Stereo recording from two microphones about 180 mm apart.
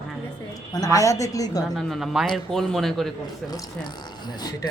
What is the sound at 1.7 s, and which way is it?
Speech, centre (ahead or behind).